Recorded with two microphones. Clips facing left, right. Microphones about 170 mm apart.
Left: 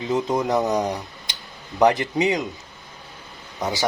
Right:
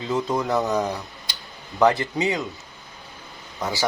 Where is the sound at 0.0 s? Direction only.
20° left (ahead or behind).